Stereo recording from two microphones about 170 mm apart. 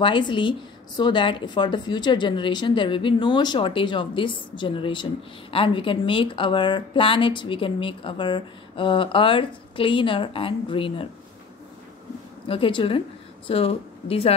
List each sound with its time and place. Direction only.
0.0 s a woman's voice: 30° left (ahead or behind)
12.4 s a woman's voice: 30° left (ahead or behind)